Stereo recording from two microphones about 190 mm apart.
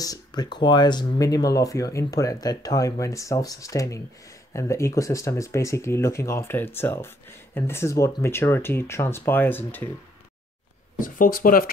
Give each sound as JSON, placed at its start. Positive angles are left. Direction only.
{"t": 0.0, "sound": "speech", "side_deg": 20}
{"t": 11.0, "sound": "speech", "side_deg": 45}